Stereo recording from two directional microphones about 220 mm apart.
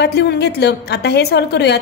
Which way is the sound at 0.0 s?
50° left (ahead or behind).